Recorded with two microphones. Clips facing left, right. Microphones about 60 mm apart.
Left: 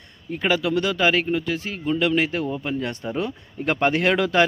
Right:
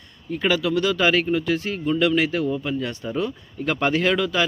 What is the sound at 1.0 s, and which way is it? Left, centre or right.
Speech, centre.